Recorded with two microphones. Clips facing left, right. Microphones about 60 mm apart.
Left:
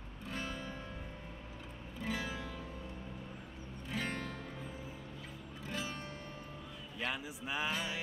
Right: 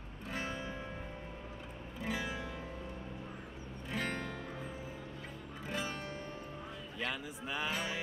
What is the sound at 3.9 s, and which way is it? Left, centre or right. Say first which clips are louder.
Music: right 1 dB; centre.